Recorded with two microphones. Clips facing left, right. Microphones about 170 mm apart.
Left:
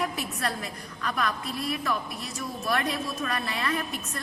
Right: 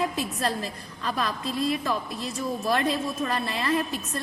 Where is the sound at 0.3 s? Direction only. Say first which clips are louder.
Right 3 dB; 30° right (ahead or behind).